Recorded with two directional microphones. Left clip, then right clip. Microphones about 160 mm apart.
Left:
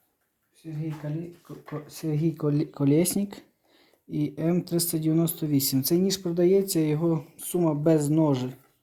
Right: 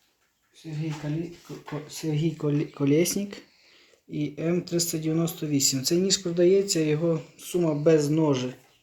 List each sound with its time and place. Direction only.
0.6 s speech: 25° left (ahead or behind)
1.9 s speech: 45° left (ahead or behind); by 3.4 s 70° left (ahead or behind)
4.1 s speech: 90° left